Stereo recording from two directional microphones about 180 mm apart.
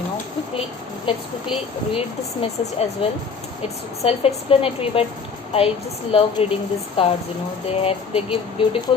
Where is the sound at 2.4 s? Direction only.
30° left (ahead or behind).